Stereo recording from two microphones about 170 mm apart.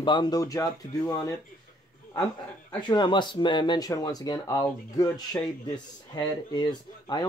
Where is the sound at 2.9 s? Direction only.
25° left (ahead or behind).